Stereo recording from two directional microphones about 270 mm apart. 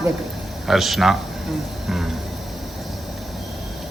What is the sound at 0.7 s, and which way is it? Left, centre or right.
Speech, centre.